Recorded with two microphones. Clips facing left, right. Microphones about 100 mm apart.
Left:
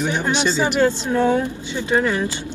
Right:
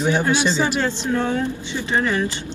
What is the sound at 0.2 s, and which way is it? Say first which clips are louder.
Speech: even; 20° left (ahead or behind).